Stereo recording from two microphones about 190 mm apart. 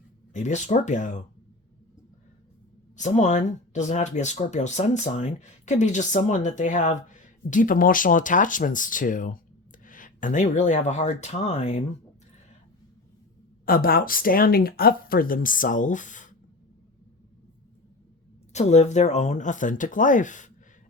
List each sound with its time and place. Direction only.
0.3 s speech: 40° left (ahead or behind)
2.9 s speech: 40° left (ahead or behind)
13.7 s speech: 50° left (ahead or behind)
18.5 s speech: 35° left (ahead or behind)